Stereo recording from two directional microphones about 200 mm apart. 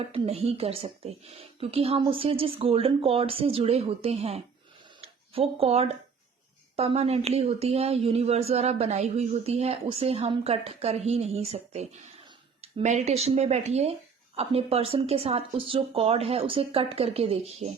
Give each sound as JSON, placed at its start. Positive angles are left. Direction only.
{"t": 0.1, "sound": "a woman's voice", "side_deg": -30}